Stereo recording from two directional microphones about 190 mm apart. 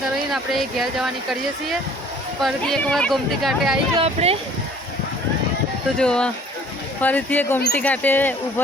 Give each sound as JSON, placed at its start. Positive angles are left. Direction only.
{"t": 0.3, "sound": "speech", "side_deg": 0}
{"t": 3.9, "sound": "speech", "side_deg": -30}
{"t": 6.0, "sound": "speech", "side_deg": 5}